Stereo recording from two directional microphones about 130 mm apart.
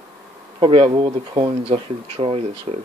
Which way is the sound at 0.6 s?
45° right (ahead or behind).